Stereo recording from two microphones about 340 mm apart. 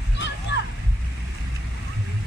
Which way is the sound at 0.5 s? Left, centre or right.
Left.